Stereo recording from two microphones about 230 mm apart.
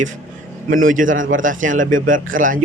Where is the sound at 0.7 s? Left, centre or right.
Right.